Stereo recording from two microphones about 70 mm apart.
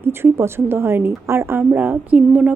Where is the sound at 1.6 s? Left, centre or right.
Right.